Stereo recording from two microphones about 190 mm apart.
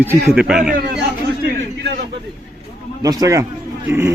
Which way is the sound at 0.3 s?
5° right (ahead or behind).